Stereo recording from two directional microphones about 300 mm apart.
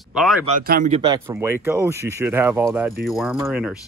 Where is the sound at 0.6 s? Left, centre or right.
Right; by 3.7 s centre.